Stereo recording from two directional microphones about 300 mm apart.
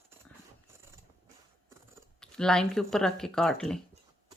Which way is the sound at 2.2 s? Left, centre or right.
Centre.